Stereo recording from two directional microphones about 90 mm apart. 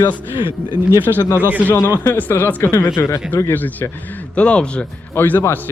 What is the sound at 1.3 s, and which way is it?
Speech, 20° right (ahead or behind).